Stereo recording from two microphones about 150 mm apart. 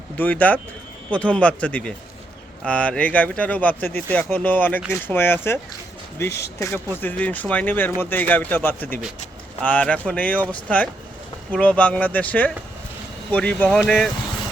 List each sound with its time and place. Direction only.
0.2 s speech: 10° left (ahead or behind)
11.5 s speech: 10° left (ahead or behind)